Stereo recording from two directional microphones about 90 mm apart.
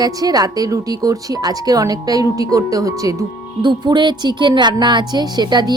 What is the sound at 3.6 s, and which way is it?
Speech, 55° right (ahead or behind).